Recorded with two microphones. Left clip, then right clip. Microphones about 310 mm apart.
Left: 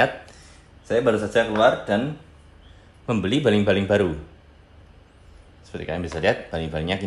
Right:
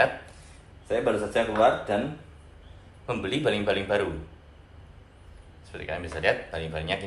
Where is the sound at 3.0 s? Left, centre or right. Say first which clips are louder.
Left 5 dB; left.